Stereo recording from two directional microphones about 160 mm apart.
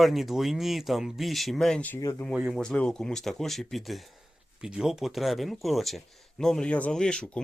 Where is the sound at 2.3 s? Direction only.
Centre (ahead or behind).